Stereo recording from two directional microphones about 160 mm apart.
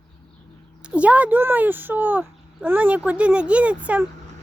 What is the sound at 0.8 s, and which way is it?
Speech, 10° right (ahead or behind).